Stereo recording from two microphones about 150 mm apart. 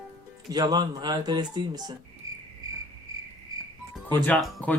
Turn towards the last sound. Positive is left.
turn(degrees=0)  # may be behind; listen again after turning